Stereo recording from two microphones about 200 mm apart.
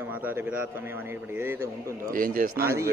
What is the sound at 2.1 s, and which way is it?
Speech, 45° right (ahead or behind).